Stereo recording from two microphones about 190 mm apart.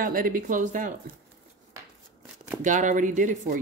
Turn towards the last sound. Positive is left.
turn(degrees=-45)  # may be behind; listen again after turning